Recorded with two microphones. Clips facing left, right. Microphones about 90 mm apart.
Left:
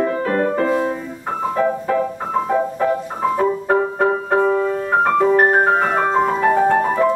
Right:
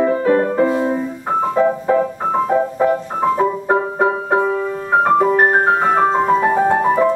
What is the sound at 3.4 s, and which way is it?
Music, 15° right (ahead or behind).